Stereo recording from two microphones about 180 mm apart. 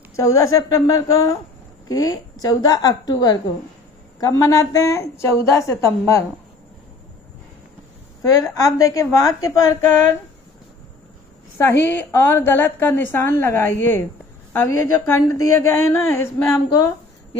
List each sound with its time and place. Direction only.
0.1 s a woman's voice: 15° left (ahead or behind)
8.2 s a woman's voice: 20° left (ahead or behind)
11.5 s a woman's voice: 10° left (ahead or behind)